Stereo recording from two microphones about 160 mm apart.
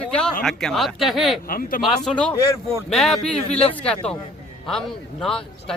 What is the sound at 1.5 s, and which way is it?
Speech, 60° left (ahead or behind).